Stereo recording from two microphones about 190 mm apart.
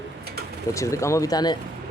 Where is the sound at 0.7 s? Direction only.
15° left (ahead or behind).